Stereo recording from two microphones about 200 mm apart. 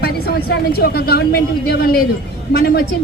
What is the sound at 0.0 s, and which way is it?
A woman's voice, 50° left (ahead or behind).